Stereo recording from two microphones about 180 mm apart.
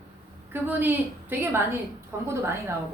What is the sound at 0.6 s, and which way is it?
A woman's voice, 10° right (ahead or behind).